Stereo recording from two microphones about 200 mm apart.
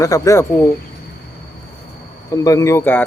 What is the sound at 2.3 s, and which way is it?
Speech, 15° left (ahead or behind).